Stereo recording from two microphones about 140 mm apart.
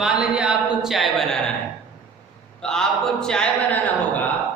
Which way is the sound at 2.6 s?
5° left (ahead or behind).